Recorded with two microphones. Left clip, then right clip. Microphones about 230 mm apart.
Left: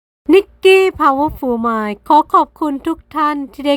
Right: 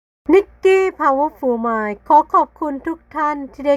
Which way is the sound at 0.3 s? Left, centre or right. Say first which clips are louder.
Left 3 dB; left.